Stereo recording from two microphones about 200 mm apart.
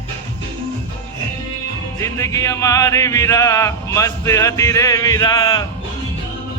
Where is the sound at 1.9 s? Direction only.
15° left (ahead or behind).